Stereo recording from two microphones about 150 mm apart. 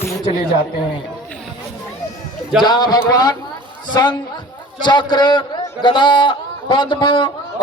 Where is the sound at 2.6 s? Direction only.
30° left (ahead or behind).